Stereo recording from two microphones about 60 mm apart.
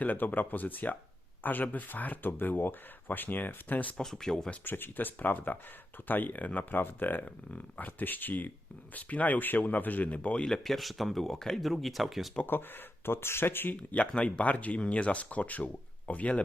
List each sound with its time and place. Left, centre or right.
0.0 s speech: left
3.9 s speech: centre
4.6 s speech: left
10.4 s speech: centre
12.5 s speech: left
13.7 s speech: centre